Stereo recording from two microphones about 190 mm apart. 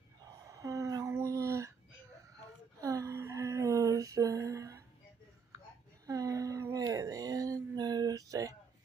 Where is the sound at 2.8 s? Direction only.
15° right (ahead or behind).